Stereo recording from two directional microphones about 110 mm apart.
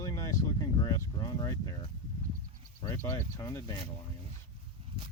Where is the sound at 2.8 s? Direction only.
20° left (ahead or behind).